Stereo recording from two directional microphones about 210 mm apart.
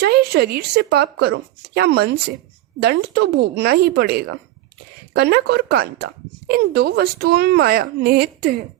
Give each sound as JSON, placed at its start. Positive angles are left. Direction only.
{"t": 0.0, "sound": "speech", "side_deg": -50}